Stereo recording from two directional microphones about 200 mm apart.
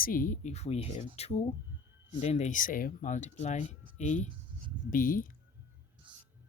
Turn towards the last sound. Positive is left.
turn(degrees=-25)  # may be behind; listen again after turning